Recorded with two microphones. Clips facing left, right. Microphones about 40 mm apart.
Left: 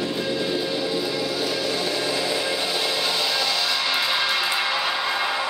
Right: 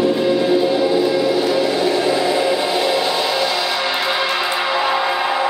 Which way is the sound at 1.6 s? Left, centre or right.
Right.